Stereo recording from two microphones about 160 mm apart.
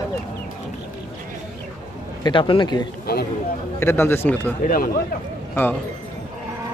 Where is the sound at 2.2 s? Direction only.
30° left (ahead or behind).